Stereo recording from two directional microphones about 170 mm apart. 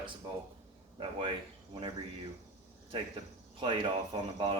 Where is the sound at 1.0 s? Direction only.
30° right (ahead or behind).